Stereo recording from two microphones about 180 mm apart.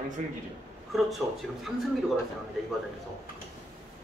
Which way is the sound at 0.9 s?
Centre (ahead or behind).